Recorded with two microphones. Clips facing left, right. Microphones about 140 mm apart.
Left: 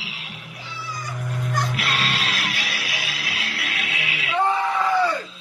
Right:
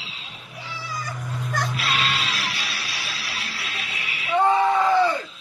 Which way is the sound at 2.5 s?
50° left (ahead or behind).